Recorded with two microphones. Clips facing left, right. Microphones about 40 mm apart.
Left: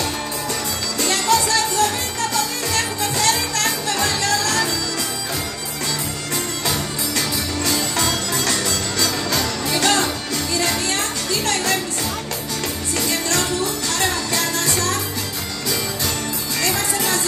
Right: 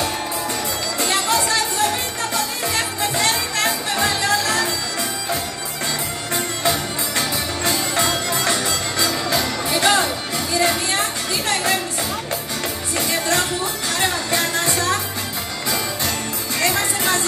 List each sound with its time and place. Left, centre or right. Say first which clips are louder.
0.9 s music: left 2 dB; right
6.3 s music: right 3 dB; right
12.9 s music: right 2 dB; centre
16.6 s music: right 2 dB; right